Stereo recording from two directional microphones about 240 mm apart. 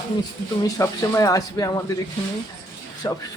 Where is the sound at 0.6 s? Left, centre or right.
Centre.